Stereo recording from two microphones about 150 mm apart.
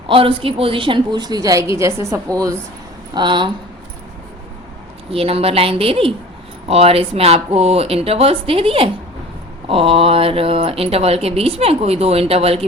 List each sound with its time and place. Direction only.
0.1 s a woman's voice: 35° right (ahead or behind)
3.2 s speech: 30° right (ahead or behind)
5.1 s speech: 40° right (ahead or behind)